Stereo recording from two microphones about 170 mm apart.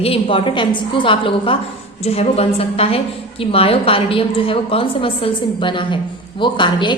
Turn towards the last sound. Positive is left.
turn(degrees=25)  # may be behind; listen again after turning